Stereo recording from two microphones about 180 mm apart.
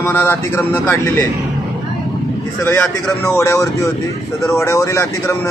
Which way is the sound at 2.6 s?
10° left (ahead or behind).